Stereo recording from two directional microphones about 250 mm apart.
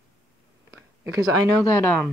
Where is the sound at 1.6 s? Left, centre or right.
Centre.